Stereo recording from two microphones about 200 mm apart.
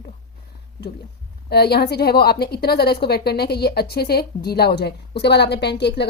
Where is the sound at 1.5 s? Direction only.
50° left (ahead or behind).